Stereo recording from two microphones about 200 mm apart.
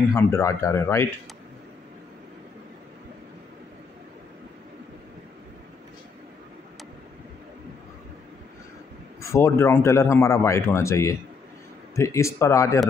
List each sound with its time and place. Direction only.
0.1 s speech: 15° left (ahead or behind)
9.2 s speech: 15° left (ahead or behind)